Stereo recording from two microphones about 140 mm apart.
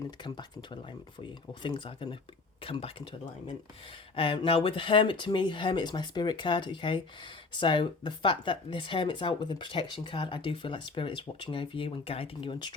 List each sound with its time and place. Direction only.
0.2 s speech: 35° left (ahead or behind)
4.1 s speech: 40° left (ahead or behind)